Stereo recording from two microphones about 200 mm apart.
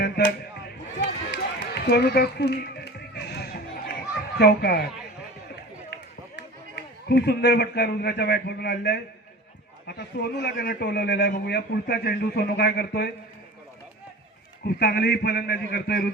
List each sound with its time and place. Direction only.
0.9 s run: 55° left (ahead or behind)
4.4 s a man's voice: 55° left (ahead or behind)
5.9 s a man's voice: 55° left (ahead or behind)
14.8 s a man's voice: 55° left (ahead or behind)